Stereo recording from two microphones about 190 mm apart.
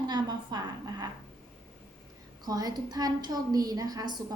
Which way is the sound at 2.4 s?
20° right (ahead or behind).